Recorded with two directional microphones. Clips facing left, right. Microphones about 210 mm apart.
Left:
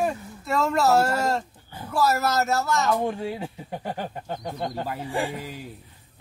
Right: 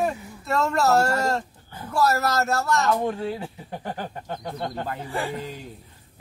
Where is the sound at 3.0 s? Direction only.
15° left (ahead or behind).